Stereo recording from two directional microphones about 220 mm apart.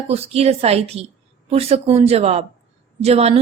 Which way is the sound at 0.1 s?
30° right (ahead or behind).